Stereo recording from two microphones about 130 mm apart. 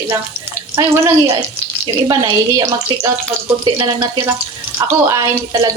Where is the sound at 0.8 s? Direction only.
20° right (ahead or behind).